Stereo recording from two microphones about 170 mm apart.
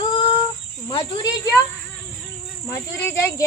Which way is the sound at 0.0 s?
30° left (ahead or behind).